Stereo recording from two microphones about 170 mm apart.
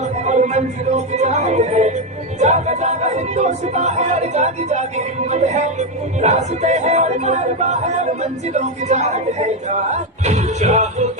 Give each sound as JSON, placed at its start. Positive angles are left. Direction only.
{"t": 0.0, "sound": "speech", "side_deg": -45}